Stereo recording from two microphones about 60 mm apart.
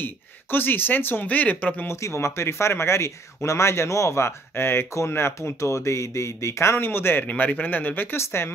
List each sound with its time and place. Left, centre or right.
0.0 s speech: left
1.9 s speech: left
7.2 s speech: left
8.2 s speech: left